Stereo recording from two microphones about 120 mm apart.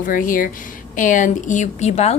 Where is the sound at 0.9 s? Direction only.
90° left; by 2.1 s 65° left (ahead or behind).